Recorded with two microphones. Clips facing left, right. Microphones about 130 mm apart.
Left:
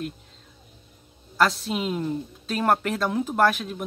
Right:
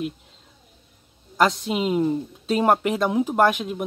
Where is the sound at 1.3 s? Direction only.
15° right (ahead or behind).